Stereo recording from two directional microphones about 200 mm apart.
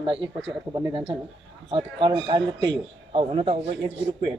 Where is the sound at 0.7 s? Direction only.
25° right (ahead or behind).